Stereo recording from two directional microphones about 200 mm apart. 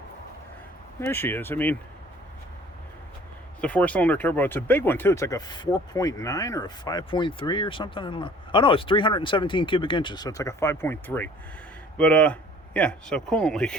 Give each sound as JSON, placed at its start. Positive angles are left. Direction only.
{"t": 0.9, "sound": "speech", "side_deg": 10}
{"t": 3.6, "sound": "speech", "side_deg": 5}